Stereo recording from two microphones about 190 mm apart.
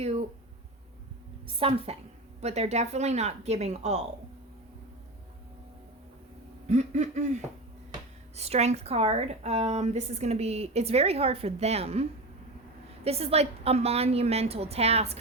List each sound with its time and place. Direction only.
1.5 s a woman's voice: 30° right (ahead or behind)
6.7 s a woman's voice: 40° right (ahead or behind)
13.1 s a woman's voice: 35° right (ahead or behind)